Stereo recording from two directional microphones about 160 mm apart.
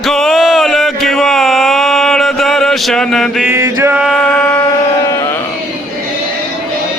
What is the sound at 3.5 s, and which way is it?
Mantra, 15° right (ahead or behind).